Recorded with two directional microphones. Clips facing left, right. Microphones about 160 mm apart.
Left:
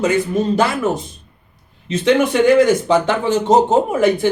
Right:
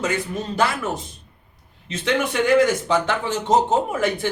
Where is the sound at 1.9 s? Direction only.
20° left (ahead or behind).